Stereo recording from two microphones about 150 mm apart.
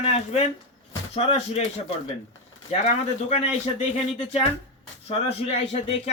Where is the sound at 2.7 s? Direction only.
45° left (ahead or behind).